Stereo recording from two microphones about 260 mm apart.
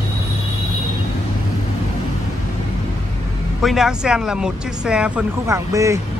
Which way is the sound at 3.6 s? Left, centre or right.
Centre.